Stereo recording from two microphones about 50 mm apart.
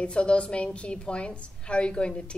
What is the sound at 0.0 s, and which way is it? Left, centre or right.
Speech, left.